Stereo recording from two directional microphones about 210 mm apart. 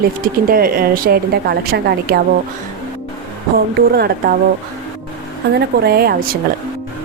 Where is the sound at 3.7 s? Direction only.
50° right (ahead or behind).